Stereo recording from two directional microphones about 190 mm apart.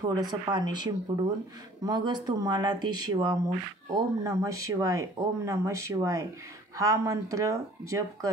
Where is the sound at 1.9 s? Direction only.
25° right (ahead or behind).